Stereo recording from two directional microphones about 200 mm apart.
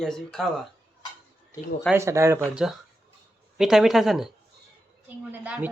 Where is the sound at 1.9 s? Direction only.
15° right (ahead or behind).